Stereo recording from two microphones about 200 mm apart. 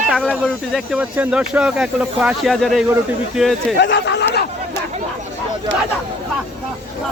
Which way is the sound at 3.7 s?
60° left (ahead or behind).